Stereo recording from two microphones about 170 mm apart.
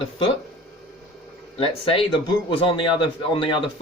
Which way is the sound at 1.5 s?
35° left (ahead or behind).